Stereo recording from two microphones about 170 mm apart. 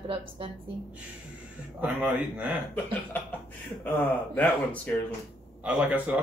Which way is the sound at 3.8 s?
10° left (ahead or behind).